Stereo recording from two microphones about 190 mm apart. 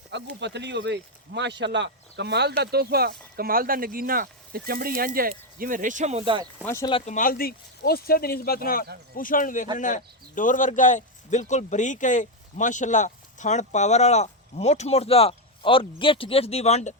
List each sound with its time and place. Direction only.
0.3 s speech: 65° right (ahead or behind); by 6.5 s 25° right (ahead or behind)
6.6 s speech: 15° left (ahead or behind)
6.9 s speech: 40° left (ahead or behind)